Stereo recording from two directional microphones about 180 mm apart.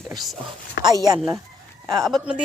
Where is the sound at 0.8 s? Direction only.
20° right (ahead or behind).